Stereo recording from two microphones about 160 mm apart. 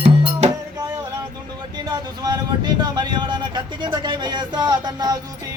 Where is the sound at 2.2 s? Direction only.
25° right (ahead or behind).